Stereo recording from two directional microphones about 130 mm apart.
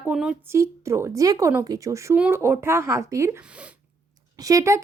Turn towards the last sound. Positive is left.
turn(degrees=-25)  # may be behind; listen again after turning